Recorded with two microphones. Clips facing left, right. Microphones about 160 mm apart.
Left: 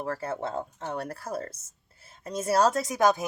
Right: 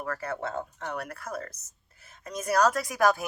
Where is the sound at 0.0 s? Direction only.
25° left (ahead or behind).